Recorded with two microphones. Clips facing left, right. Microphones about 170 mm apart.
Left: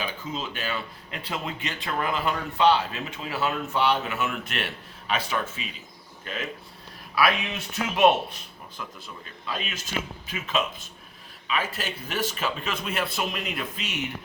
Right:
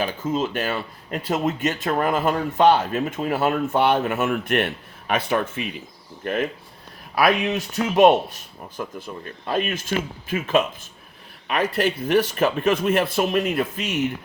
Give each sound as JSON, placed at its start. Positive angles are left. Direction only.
{"t": 0.0, "sound": "speech", "side_deg": -45}
{"t": 7.2, "sound": "speech", "side_deg": -40}
{"t": 8.8, "sound": "speech", "side_deg": -50}